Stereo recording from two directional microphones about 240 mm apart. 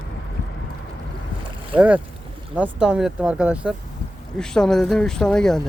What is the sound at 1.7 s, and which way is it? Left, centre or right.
Speech, centre.